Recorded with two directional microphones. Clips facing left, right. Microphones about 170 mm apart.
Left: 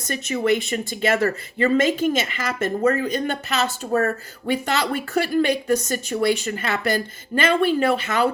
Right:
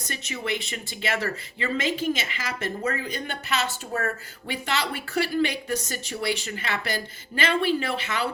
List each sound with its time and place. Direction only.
0.1 s speech: 45° left (ahead or behind)